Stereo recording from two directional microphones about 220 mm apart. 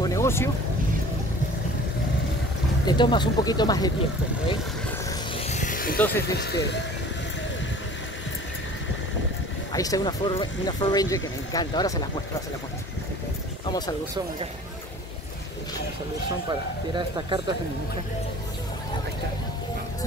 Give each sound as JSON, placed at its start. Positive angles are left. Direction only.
{"t": 0.0, "sound": "vehicle", "side_deg": 15}
{"t": 2.9, "sound": "speech", "side_deg": 20}
{"t": 5.4, "sound": "a sound", "side_deg": 30}
{"t": 5.9, "sound": "speech", "side_deg": 10}
{"t": 6.3, "sound": "speech", "side_deg": 50}
{"t": 9.7, "sound": "speech", "side_deg": 15}
{"t": 13.7, "sound": "speech", "side_deg": 20}
{"t": 16.4, "sound": "speech", "side_deg": -20}